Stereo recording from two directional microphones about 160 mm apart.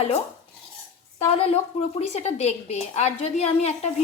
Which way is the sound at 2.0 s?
45° left (ahead or behind).